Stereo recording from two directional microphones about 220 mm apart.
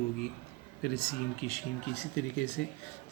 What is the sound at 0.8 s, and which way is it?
Speech, 45° left (ahead or behind).